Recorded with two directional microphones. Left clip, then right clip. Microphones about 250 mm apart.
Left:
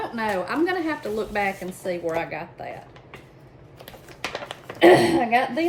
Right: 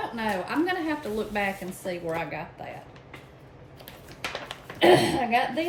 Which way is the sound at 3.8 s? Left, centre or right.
Left.